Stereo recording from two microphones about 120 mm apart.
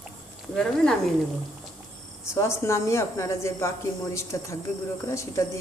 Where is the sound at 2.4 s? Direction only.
25° left (ahead or behind).